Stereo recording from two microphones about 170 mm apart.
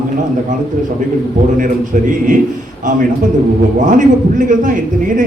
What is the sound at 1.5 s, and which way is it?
Speech, 50° right (ahead or behind).